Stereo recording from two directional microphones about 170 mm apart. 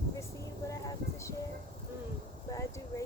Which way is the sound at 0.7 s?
20° left (ahead or behind).